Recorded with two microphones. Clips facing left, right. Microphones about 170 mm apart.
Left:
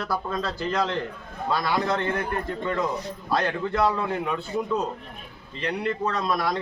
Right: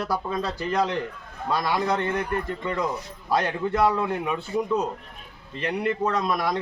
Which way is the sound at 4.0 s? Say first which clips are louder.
Right 1 dB; 10° right (ahead or behind).